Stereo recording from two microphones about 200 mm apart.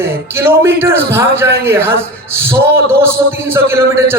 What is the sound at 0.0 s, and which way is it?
Speech, 10° right (ahead or behind).